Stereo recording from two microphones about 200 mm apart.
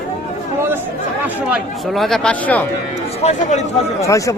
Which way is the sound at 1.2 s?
5° right (ahead or behind).